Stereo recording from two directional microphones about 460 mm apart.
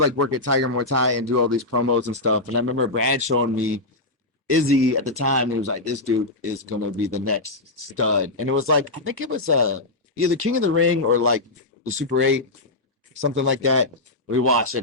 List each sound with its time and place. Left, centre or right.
0.0 s speech: right